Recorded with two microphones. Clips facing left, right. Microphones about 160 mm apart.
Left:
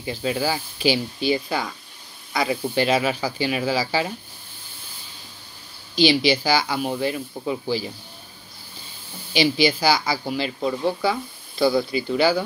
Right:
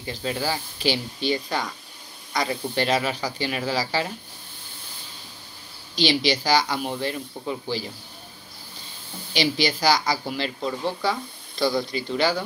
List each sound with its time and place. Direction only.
0.0 s speech: 10° left (ahead or behind)
5.9 s speech: 5° left (ahead or behind)
9.3 s speech: 5° left (ahead or behind)